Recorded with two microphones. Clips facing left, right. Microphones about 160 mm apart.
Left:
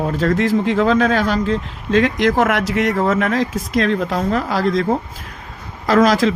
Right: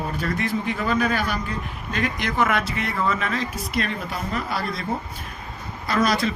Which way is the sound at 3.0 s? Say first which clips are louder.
Left 8 dB; 75° left (ahead or behind).